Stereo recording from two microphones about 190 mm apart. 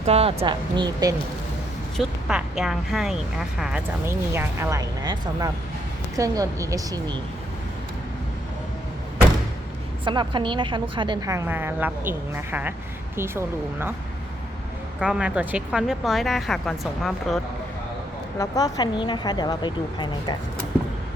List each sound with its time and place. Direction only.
0.0 s a woman's voice: 35° right (ahead or behind)
2.0 s a woman's voice: centre (ahead or behind); by 7.2 s 20° right (ahead or behind)
10.0 s a woman's voice: 25° right (ahead or behind)
15.0 s speech: 5° right (ahead or behind)
18.3 s speech: 20° left (ahead or behind)